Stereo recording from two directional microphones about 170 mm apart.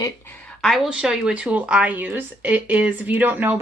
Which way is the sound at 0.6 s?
Centre (ahead or behind).